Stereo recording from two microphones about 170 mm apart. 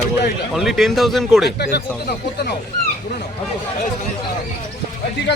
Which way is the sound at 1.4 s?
75° left (ahead or behind).